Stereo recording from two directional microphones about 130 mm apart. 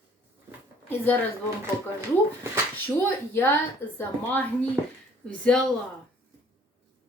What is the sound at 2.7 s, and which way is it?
A woman's voice, 15° left (ahead or behind).